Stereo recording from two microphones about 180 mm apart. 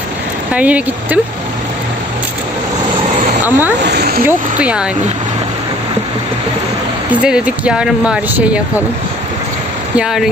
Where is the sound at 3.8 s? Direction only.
60° right (ahead or behind).